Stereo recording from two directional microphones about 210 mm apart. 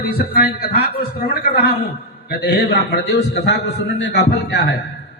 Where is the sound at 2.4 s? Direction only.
55° left (ahead or behind).